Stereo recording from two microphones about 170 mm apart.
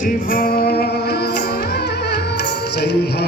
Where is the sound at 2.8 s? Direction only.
75° left (ahead or behind).